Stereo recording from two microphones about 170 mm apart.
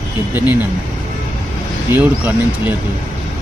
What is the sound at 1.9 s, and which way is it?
Speech, 10° right (ahead or behind).